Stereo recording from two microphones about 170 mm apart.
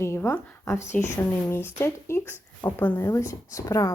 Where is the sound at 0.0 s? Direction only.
15° left (ahead or behind).